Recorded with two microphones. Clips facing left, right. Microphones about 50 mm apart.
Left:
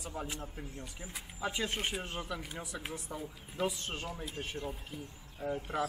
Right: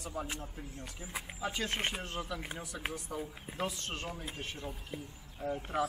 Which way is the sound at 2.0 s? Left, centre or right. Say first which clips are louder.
Even; centre.